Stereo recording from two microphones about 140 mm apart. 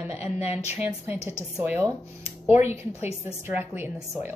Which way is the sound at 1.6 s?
10° right (ahead or behind).